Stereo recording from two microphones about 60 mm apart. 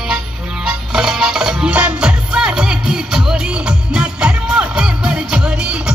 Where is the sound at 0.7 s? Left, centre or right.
Centre.